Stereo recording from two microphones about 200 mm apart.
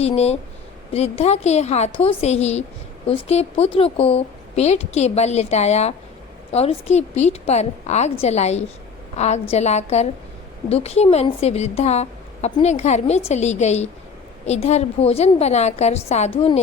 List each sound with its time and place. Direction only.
0.0 s a woman's voice: 30° left (ahead or behind)